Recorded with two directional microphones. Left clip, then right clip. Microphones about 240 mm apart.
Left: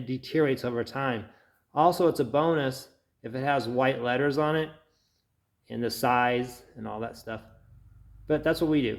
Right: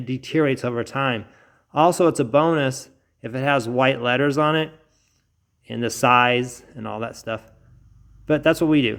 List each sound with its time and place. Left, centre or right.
0.0 s a man's voice: right